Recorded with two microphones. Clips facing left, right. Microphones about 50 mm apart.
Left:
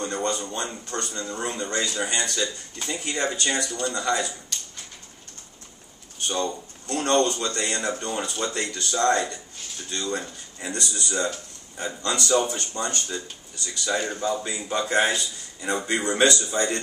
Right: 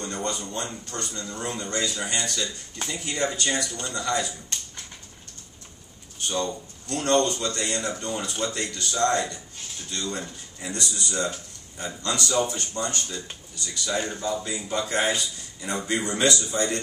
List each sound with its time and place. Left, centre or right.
0.0 s a man's voice: left
6.2 s a man's voice: centre